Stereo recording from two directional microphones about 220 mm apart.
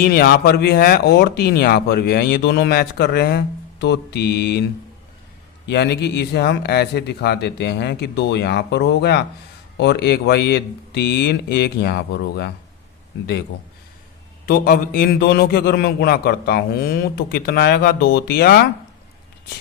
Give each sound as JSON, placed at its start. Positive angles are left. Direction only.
{"t": 0.0, "sound": "speech", "side_deg": 45}
{"t": 5.6, "sound": "speech", "side_deg": 50}
{"t": 14.4, "sound": "speech", "side_deg": 45}